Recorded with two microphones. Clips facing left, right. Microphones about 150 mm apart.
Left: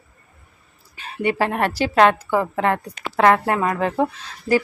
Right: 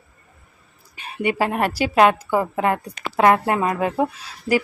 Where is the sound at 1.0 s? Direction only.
15° right (ahead or behind).